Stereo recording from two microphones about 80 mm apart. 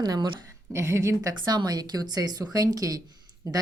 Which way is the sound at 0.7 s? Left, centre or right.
Right.